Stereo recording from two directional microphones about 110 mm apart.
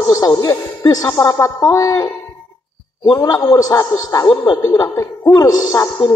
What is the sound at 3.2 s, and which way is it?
A man's voice, 35° left (ahead or behind).